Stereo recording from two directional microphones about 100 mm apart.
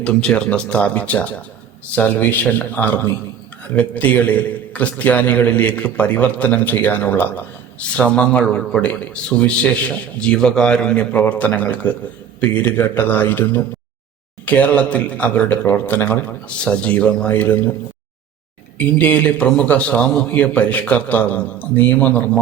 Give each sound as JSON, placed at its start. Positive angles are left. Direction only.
{"t": 0.0, "sound": "a man's voice", "side_deg": 10}
{"t": 18.8, "sound": "a man's voice", "side_deg": 15}